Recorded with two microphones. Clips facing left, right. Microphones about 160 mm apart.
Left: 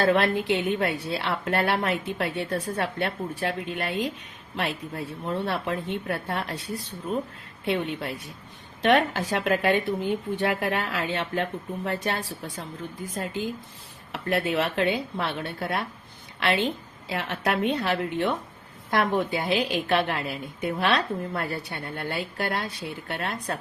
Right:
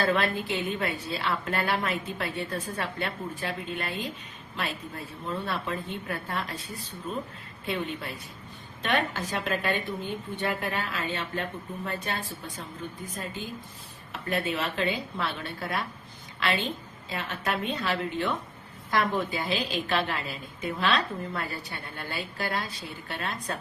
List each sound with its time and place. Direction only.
0.0 s a woman's voice: 70° left (ahead or behind)
4.5 s a woman's voice: 70° left (ahead or behind)
14.1 s a woman's voice: 70° left (ahead or behind)
19.3 s a woman's voice: 65° left (ahead or behind)